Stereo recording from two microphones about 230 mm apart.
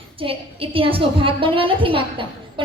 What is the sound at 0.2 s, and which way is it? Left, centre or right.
A woman's voice, right.